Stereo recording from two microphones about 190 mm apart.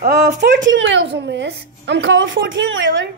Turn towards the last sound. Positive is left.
turn(degrees=-75)  # may be behind; listen again after turning